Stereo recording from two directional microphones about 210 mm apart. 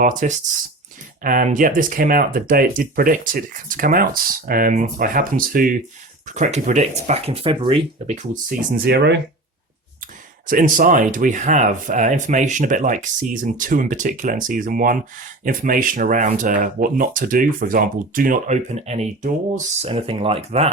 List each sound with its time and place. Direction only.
0.0 s speech: 35° right (ahead or behind)
8.8 s speech: 50° right (ahead or behind)
10.4 s speech: 40° right (ahead or behind)